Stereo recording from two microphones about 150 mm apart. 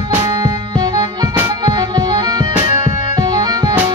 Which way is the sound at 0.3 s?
25° right (ahead or behind).